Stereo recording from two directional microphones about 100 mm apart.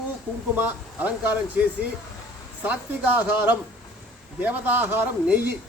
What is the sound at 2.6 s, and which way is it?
Speech, 20° right (ahead or behind).